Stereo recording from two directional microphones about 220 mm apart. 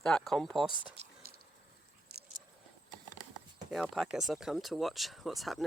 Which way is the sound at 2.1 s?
45° right (ahead or behind).